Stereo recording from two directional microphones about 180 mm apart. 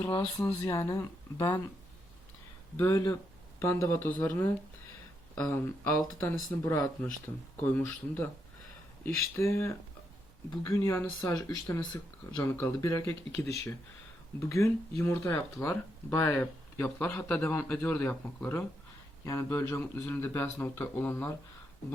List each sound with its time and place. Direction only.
0.3 s speech: 15° left (ahead or behind)
2.7 s speech: 15° left (ahead or behind)
9.3 s speech: 15° left (ahead or behind)